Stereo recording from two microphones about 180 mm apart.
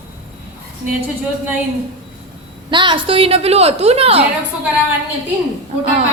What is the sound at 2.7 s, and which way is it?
A woman's voice, 25° right (ahead or behind).